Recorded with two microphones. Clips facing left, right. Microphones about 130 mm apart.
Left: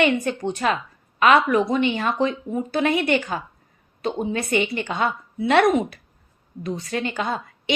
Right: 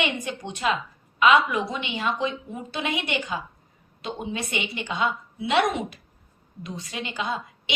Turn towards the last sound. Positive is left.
turn(degrees=50)  # may be behind; listen again after turning